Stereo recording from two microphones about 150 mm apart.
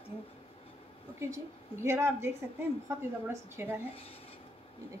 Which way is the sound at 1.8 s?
15° right (ahead or behind).